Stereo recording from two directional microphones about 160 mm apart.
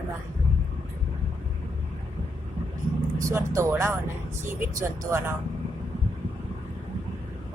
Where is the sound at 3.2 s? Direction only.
15° right (ahead or behind).